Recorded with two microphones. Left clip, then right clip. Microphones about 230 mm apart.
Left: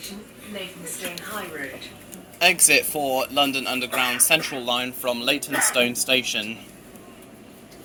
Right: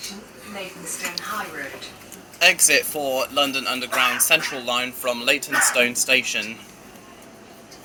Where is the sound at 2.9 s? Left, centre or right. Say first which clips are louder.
Even; left.